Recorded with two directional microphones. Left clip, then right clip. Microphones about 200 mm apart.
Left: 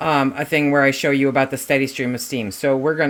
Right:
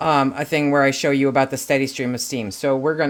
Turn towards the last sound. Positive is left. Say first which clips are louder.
# left 1 dB
turn(degrees=5)  # may be behind; listen again after turning